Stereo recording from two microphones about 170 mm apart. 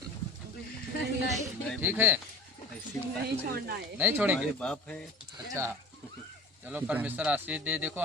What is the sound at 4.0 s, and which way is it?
Speech, 10° right (ahead or behind).